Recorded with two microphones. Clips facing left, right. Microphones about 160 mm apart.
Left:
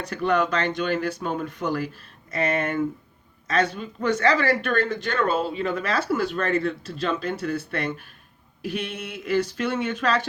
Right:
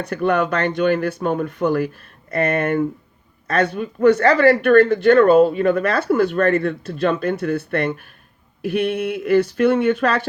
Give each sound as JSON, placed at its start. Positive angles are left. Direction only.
{"t": 0.0, "sound": "speech", "side_deg": -55}